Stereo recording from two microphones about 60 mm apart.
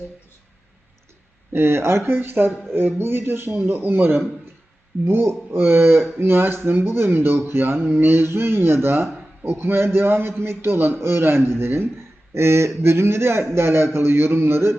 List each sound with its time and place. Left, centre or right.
1.5 s a man's voice: right